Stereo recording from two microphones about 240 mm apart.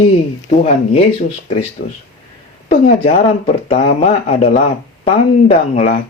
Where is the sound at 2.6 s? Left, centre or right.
Left.